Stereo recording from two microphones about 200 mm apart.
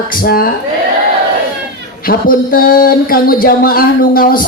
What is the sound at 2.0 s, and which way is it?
A woman's voice, 45° left (ahead or behind).